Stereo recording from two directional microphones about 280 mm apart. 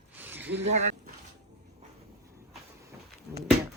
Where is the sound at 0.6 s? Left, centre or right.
Right.